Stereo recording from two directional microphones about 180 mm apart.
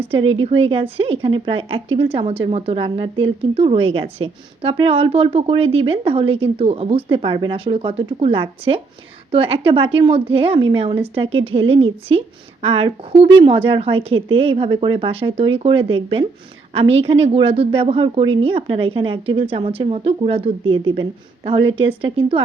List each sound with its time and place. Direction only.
0.1 s a woman's voice: 30° right (ahead or behind)